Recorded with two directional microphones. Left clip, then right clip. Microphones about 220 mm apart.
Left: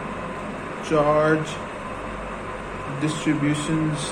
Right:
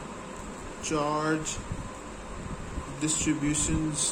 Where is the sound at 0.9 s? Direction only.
50° right (ahead or behind).